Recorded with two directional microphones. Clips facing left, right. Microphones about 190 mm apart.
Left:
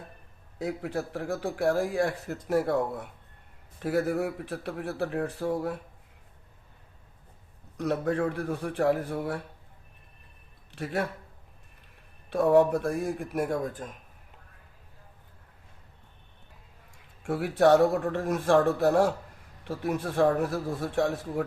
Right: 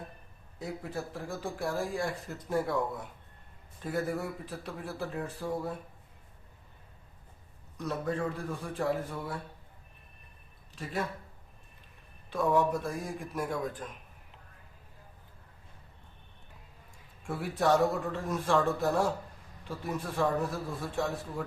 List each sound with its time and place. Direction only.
0.6 s speech: 75° left (ahead or behind)
3.8 s speech: 75° left (ahead or behind)
7.8 s speech: 70° left (ahead or behind)
10.8 s a man's voice: 65° left (ahead or behind)
12.3 s a man's voice: 60° left (ahead or behind)
17.2 s a man's voice: 70° left (ahead or behind)